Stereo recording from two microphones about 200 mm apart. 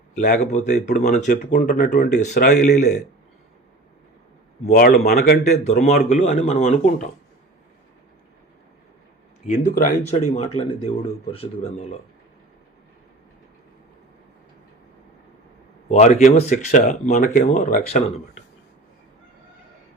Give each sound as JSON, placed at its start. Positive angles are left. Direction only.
{"t": 0.2, "sound": "speech", "side_deg": 40}
{"t": 4.6, "sound": "speech", "side_deg": 35}
{"t": 5.8, "sound": "speech", "side_deg": 35}
{"t": 9.5, "sound": "speech", "side_deg": 45}
{"t": 15.9, "sound": "speech", "side_deg": 35}